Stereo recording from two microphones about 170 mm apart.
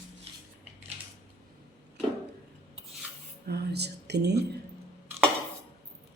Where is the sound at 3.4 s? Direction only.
70° right (ahead or behind).